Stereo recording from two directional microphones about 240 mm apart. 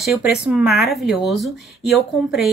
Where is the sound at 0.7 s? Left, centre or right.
Left.